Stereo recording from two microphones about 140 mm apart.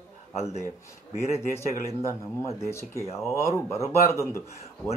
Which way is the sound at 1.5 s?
20° left (ahead or behind).